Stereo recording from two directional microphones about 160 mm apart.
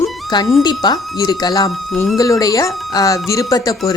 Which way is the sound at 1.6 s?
Centre (ahead or behind).